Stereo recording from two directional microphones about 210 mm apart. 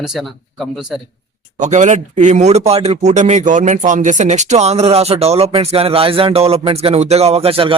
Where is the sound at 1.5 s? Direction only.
35° right (ahead or behind).